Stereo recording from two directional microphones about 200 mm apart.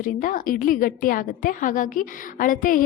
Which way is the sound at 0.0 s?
40° left (ahead or behind).